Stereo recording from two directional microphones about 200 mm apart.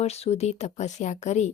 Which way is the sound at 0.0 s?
30° left (ahead or behind).